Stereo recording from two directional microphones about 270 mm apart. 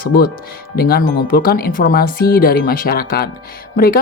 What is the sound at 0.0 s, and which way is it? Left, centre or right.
Speech, left.